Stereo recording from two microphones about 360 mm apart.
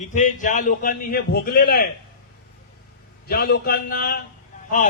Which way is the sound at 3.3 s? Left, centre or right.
Left.